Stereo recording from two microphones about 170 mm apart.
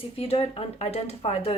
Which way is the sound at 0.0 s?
35° left (ahead or behind).